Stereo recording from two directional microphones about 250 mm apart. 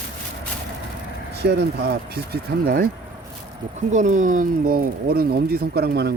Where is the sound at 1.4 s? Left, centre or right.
Right.